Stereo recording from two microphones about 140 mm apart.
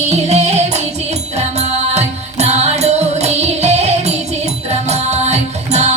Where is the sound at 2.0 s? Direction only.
50° right (ahead or behind).